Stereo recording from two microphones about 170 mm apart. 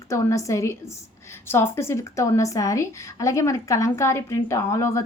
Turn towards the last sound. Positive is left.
turn(degrees=15)  # may be behind; listen again after turning